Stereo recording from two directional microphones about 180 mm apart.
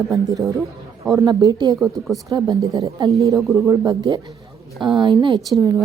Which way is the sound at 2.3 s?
20° right (ahead or behind).